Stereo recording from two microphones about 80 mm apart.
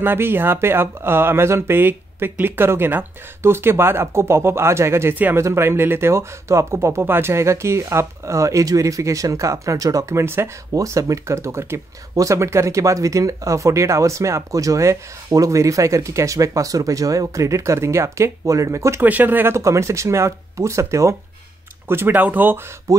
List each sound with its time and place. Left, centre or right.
0.0 s speech: right
10.8 s speech: right
19.0 s speech: right
19.5 s speech: right
21.8 s speech: right
22.9 s speech: right